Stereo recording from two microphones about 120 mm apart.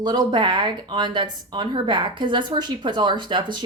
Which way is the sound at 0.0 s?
35° right (ahead or behind).